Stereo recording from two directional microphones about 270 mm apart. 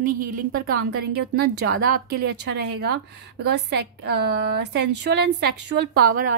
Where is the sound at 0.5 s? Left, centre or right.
Right.